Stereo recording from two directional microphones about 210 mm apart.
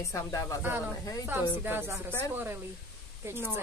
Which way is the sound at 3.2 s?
10° right (ahead or behind).